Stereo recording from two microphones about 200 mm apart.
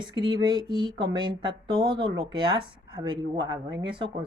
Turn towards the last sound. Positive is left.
turn(degrees=-25)  # may be behind; listen again after turning